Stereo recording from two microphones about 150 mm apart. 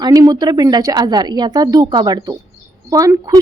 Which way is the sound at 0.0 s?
25° right (ahead or behind).